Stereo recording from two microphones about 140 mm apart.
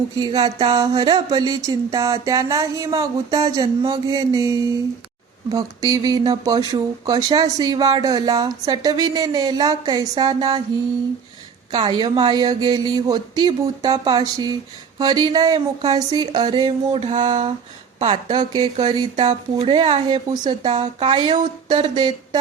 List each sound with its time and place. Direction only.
0.2 s speech: 30° right (ahead or behind)
11.7 s speech: 30° right (ahead or behind)